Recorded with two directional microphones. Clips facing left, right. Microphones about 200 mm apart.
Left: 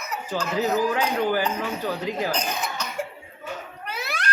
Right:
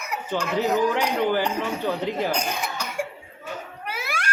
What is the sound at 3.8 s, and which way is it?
Music, 10° right (ahead or behind).